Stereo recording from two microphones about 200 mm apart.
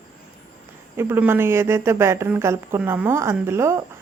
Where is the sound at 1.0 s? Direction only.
10° right (ahead or behind).